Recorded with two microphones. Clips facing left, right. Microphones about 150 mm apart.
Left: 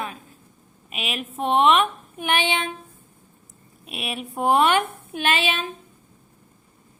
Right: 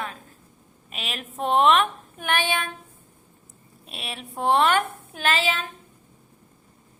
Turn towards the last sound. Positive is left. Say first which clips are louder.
# left 1 dB
turn(degrees=20)  # may be behind; listen again after turning